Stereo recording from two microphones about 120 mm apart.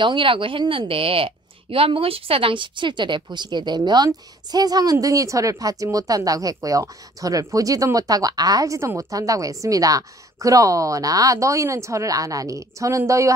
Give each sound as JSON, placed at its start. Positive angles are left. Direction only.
{"t": 0.0, "sound": "a woman's voice", "side_deg": -45}